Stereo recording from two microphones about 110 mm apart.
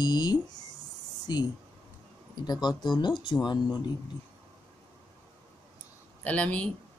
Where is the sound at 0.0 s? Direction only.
40° left (ahead or behind).